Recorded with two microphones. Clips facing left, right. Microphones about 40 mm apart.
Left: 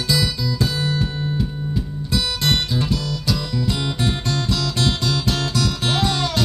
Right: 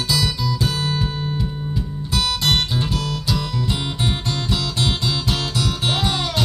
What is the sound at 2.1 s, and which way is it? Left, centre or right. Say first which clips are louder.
Guitar: right 1 dB; right.